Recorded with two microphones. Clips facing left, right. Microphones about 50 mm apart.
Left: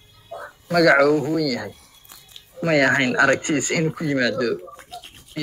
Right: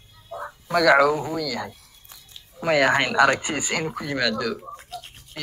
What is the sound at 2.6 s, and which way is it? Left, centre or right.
Speech, centre.